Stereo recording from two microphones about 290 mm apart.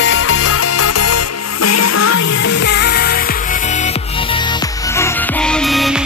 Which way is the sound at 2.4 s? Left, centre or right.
Left.